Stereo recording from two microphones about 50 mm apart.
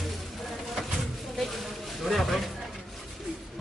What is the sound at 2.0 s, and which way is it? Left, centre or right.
Speech, centre.